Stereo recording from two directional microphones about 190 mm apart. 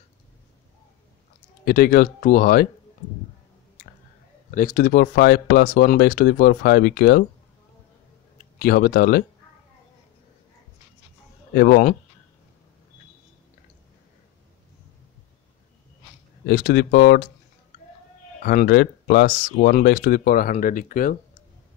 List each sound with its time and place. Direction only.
1.6 s speech: 50° left (ahead or behind)
4.5 s speech: 45° left (ahead or behind)
8.4 s speech: 50° left (ahead or behind)
11.5 s speech: 50° left (ahead or behind)
16.4 s speech: 55° left (ahead or behind)
18.4 s speech: 50° left (ahead or behind)